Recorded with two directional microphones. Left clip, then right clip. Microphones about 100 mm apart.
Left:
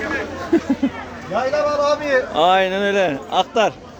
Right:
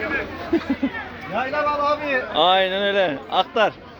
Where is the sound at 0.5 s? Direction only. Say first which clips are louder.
Left 4 dB; 45° left (ahead or behind).